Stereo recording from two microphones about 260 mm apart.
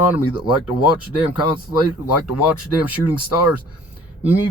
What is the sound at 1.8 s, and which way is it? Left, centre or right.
Speech, left.